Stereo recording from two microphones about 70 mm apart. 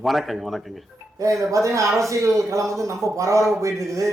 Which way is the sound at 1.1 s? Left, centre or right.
Right.